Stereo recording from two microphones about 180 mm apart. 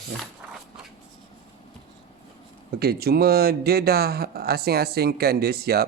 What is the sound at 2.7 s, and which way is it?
Speech, 60° right (ahead or behind).